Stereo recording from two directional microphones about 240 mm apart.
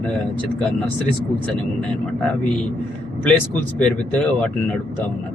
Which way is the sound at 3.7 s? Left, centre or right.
Centre.